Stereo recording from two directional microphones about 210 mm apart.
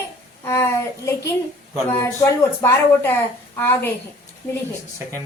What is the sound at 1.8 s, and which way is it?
Speech, 10° left (ahead or behind).